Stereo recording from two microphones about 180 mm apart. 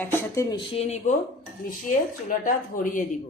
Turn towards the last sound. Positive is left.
turn(degrees=45)  # may be behind; listen again after turning